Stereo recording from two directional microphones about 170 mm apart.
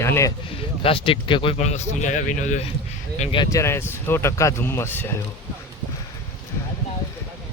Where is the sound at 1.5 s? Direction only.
40° left (ahead or behind).